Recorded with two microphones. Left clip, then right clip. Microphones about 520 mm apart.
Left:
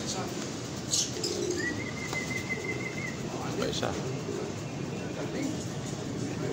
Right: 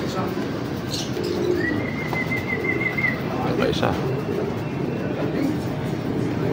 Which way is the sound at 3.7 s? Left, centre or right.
Left.